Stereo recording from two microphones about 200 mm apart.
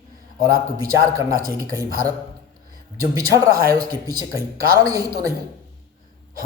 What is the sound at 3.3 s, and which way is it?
Speech, 15° right (ahead or behind).